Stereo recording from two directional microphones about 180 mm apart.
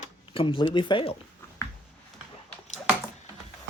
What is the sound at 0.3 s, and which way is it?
Speech, 25° left (ahead or behind).